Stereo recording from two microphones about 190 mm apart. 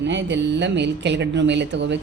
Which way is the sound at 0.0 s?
70° right (ahead or behind).